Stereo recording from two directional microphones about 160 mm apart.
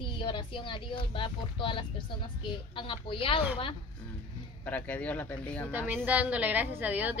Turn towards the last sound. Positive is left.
turn(degrees=-10)  # may be behind; listen again after turning